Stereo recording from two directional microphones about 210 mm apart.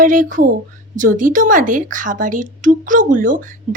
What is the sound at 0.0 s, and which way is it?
A woman's voice, 40° right (ahead or behind).